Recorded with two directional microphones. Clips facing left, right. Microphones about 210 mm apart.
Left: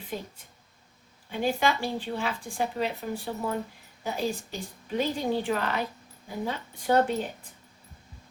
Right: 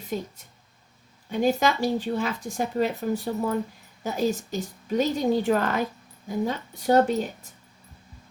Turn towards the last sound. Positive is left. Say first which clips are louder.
# right 4 dB
turn(degrees=-40)  # may be behind; listen again after turning